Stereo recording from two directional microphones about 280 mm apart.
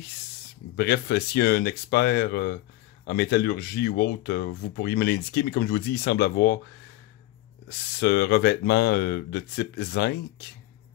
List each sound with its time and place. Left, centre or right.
0.7 s speech: left
8.0 s speech: left